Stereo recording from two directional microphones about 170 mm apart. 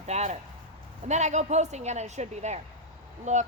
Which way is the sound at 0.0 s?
40° right (ahead or behind).